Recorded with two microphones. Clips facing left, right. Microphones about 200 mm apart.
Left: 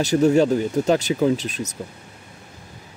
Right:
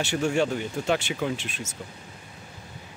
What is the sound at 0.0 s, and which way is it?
Speech, 40° left (ahead or behind).